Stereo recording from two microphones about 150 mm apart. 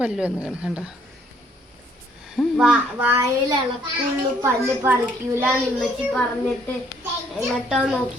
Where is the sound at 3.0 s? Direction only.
15° right (ahead or behind).